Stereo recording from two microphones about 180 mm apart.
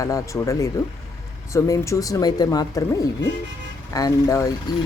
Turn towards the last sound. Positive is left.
turn(degrees=20)  # may be behind; listen again after turning